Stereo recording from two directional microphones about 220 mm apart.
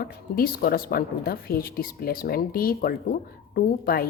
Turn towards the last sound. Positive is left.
turn(degrees=40)  # may be behind; listen again after turning